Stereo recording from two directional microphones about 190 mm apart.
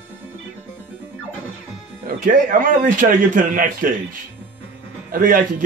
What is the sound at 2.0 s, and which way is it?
A man's voice, 45° right (ahead or behind).